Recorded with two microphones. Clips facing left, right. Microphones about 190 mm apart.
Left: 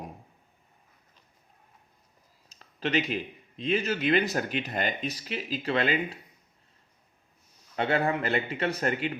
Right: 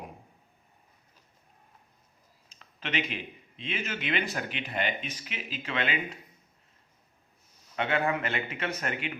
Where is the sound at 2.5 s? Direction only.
40° left (ahead or behind).